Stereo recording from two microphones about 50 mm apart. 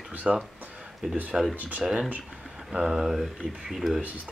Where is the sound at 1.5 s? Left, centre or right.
Right.